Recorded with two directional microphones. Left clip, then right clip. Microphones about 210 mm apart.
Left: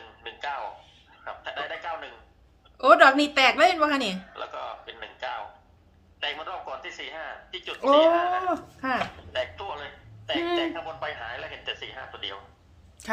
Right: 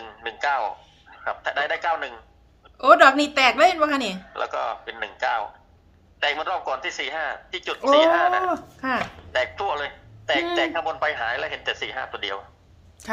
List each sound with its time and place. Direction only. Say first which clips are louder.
0.2 s a sound: right 9 dB; 50° right (ahead or behind)
1.1 s a man's voice: right 9 dB; 50° right (ahead or behind)
2.7 s a woman's voice: right 2 dB; 5° right (ahead or behind)
4.4 s a man's voice: right 9 dB; 50° right (ahead or behind)
8.4 s speech: right 2 dB; 15° right (ahead or behind)
9.3 s a man's voice: right 12 dB; 50° right (ahead or behind)
13.0 s a woman's voice: right 1 dB; centre (ahead or behind)